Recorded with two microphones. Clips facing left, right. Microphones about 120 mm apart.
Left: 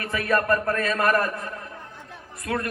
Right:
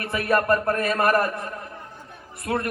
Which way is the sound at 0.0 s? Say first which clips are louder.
Right 1 dB; 30° right (ahead or behind).